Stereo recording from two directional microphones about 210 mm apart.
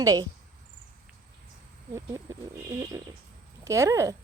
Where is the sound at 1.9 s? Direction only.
15° right (ahead or behind).